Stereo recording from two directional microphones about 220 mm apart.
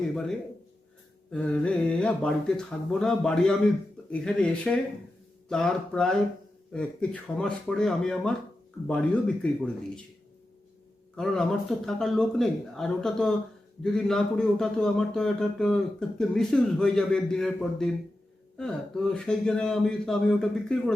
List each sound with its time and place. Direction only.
1.3 s a man's voice: 5° left (ahead or behind)
11.2 s a man's voice: centre (ahead or behind)